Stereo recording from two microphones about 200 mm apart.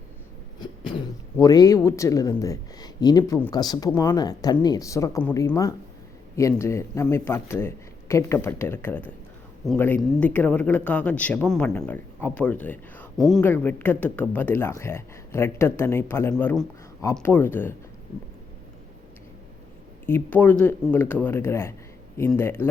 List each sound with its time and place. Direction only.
1.4 s speech: 20° left (ahead or behind)
20.1 s speech: 10° left (ahead or behind)